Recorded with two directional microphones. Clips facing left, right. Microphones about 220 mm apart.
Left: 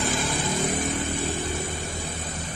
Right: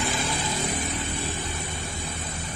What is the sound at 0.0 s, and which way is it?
Vehicle, 50° left (ahead or behind).